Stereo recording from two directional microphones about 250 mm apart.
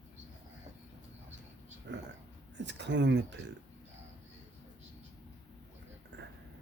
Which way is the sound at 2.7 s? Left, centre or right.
Right.